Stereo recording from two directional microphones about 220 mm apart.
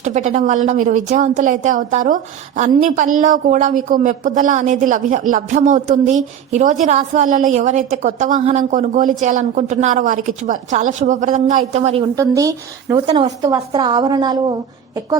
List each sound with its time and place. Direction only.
0.0 s a woman's voice: 30° right (ahead or behind)
12.1 s a woman's voice: 15° right (ahead or behind)